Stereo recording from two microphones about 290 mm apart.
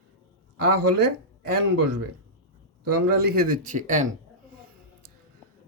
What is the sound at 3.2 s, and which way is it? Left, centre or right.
Speech, right.